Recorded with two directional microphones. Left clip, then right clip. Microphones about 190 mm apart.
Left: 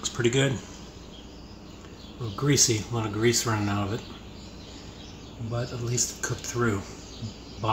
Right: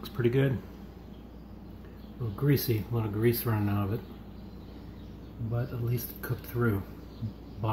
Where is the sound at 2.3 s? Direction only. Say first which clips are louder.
Left 6 dB; centre (ahead or behind).